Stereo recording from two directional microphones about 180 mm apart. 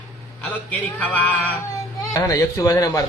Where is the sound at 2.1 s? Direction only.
20° left (ahead or behind).